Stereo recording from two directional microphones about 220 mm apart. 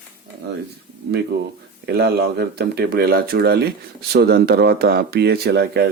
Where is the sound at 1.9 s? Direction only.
45° right (ahead or behind).